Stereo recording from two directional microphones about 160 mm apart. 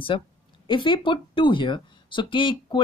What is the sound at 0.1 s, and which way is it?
A woman's voice, 30° left (ahead or behind).